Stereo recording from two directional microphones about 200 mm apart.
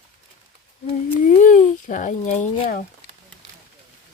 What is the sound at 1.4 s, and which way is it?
Speech, 40° left (ahead or behind).